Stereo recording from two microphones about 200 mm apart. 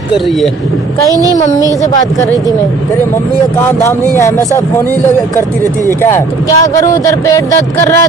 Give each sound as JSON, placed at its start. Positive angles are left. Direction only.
{"t": 1.1, "sound": "a child's voice", "side_deg": -15}
{"t": 3.5, "sound": "speech", "side_deg": 10}
{"t": 6.0, "sound": "speech", "side_deg": 15}